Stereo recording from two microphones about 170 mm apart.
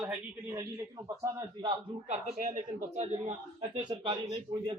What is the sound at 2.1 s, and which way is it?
A man's voice, 40° right (ahead or behind).